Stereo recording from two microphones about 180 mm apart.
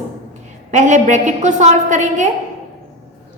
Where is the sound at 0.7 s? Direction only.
45° right (ahead or behind).